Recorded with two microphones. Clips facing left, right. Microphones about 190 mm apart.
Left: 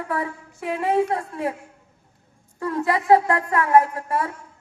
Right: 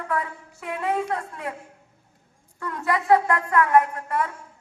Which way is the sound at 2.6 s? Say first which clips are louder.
Left 3 dB; 25° left (ahead or behind).